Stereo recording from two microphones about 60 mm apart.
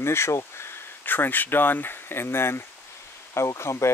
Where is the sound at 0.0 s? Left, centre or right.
Left.